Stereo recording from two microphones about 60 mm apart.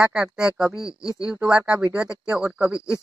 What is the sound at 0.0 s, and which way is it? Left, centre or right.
Speech, centre.